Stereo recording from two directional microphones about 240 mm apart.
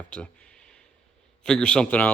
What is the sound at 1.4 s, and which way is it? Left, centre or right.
Speech, centre.